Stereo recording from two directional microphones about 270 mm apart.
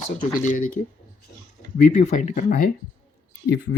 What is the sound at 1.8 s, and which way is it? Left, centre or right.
Speech, left.